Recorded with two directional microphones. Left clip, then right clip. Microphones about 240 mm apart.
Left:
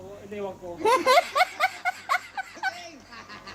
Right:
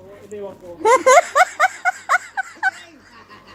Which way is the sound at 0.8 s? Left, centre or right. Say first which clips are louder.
Right 8 dB; centre.